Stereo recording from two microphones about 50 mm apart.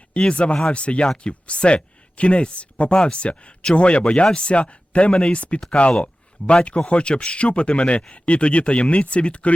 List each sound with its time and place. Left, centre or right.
0.1 s speech: left